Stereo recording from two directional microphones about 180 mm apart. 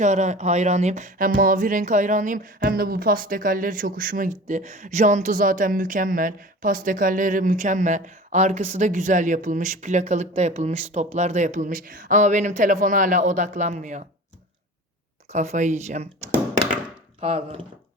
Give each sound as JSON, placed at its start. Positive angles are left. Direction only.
{"t": 0.0, "sound": "speech", "side_deg": -40}
{"t": 15.3, "sound": "speech", "side_deg": -40}
{"t": 17.2, "sound": "speech", "side_deg": -35}